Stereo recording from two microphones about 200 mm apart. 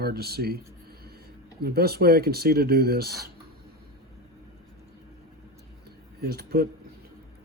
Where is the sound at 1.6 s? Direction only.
50° right (ahead or behind).